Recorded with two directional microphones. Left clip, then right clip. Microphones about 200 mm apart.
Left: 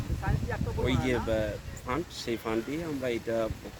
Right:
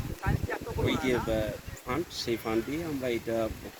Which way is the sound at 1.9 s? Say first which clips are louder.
Right 1 dB; centre (ahead or behind).